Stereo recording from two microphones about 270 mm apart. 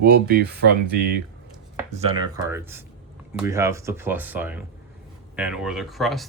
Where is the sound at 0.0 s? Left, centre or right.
Right.